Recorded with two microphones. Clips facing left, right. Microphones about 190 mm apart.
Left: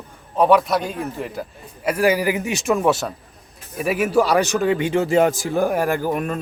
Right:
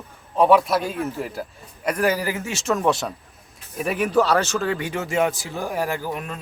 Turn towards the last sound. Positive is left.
turn(degrees=50)  # may be behind; listen again after turning